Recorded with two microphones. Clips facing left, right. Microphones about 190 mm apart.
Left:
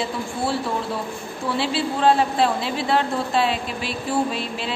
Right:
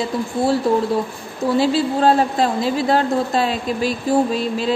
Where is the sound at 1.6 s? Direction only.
40° right (ahead or behind).